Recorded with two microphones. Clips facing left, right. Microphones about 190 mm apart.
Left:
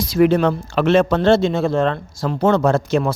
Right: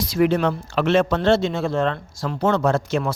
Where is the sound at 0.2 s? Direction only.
45° left (ahead or behind).